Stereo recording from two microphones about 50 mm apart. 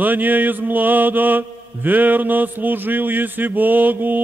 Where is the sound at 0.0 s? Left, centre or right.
Right.